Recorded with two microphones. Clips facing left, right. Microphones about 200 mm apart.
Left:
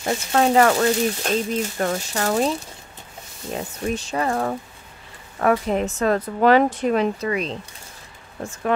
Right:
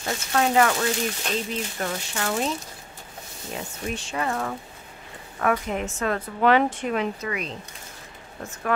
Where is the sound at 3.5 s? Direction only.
40° left (ahead or behind).